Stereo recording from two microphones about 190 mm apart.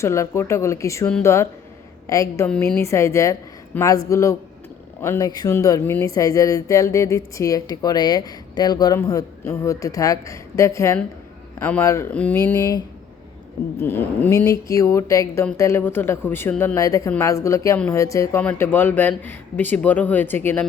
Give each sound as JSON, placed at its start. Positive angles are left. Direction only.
{"t": 0.0, "sound": "speech", "side_deg": 15}
{"t": 13.7, "sound": "speech", "side_deg": 10}